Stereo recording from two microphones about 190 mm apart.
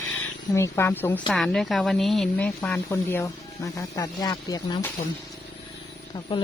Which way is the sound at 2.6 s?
15° left (ahead or behind).